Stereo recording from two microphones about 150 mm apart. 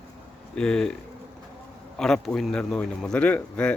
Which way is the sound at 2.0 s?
5° left (ahead or behind).